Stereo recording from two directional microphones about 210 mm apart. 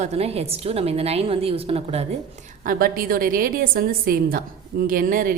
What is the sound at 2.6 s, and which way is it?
A woman's voice, 45° right (ahead or behind).